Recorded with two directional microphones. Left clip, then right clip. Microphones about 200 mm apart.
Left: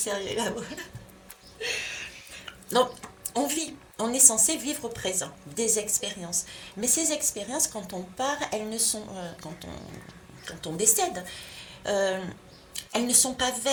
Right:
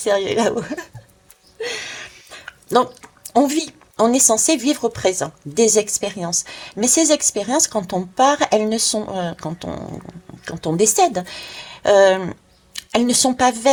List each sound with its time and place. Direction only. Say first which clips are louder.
0.0 s a woman's voice: right 12 dB; 35° right (ahead or behind)
2.5 s a sound: right 8 dB; 35° right (ahead or behind)
3.3 s a woman's voice: right 12 dB; 35° right (ahead or behind)